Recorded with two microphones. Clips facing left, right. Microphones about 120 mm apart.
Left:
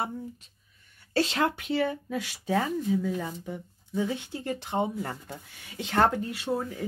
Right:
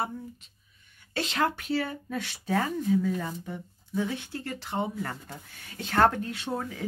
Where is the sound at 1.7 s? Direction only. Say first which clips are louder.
Left 2 dB; 20° left (ahead or behind).